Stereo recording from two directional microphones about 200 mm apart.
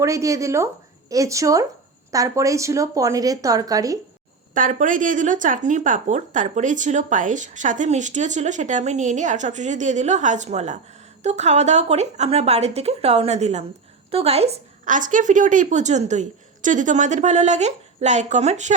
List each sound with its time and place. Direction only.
0.0 s speech: 15° right (ahead or behind)
4.5 s speech: 40° right (ahead or behind)